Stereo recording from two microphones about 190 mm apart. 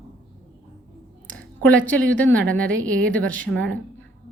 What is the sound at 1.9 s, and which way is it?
Speech, 5° left (ahead or behind).